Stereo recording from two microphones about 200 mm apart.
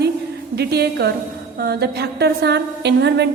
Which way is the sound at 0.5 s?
55° right (ahead or behind).